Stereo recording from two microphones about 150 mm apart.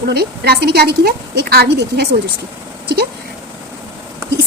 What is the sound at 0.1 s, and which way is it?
A woman's voice, 90° right.